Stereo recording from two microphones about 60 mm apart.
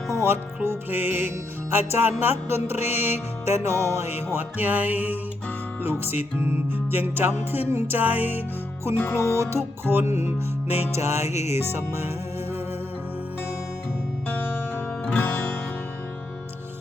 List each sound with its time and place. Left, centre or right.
0.1 s music: right
9.3 s music: right
10.9 s music: right
14.3 s music: left
15.0 s music: left